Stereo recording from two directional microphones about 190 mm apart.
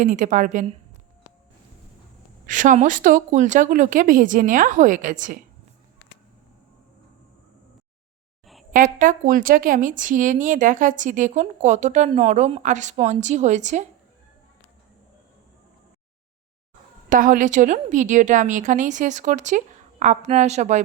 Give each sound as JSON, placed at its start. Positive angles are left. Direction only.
{"t": 0.0, "sound": "a woman's voice", "side_deg": -40}
{"t": 2.5, "sound": "a woman's voice", "side_deg": -40}
{"t": 8.7, "sound": "a woman's voice", "side_deg": -45}
{"t": 17.1, "sound": "a woman's voice", "side_deg": -45}